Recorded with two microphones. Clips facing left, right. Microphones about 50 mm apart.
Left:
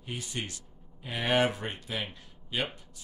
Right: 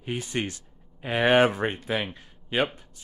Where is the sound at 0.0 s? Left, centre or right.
Right.